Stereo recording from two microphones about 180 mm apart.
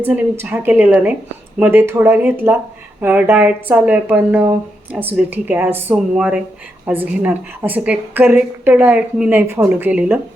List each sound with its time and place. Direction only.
0.0 s speech: 10° right (ahead or behind)